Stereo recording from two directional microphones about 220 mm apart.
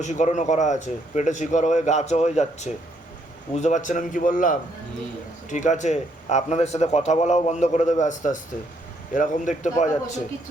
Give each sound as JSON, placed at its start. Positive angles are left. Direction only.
{"t": 0.0, "sound": "a man's voice", "side_deg": 30}